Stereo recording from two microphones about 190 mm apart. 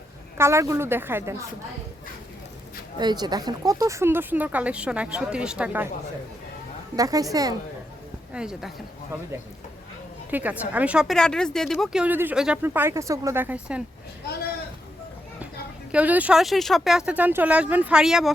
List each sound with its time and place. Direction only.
0.3 s a woman's voice: 15° right (ahead or behind)
3.0 s a woman's voice: 20° right (ahead or behind)
6.9 s a woman's voice: 20° right (ahead or behind)
8.3 s speech: 5° right (ahead or behind)
10.3 s a woman's voice: 10° right (ahead or behind)
15.9 s speech: 10° right (ahead or behind)